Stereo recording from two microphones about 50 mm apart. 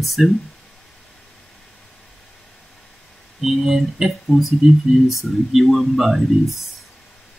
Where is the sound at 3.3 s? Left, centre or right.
Centre.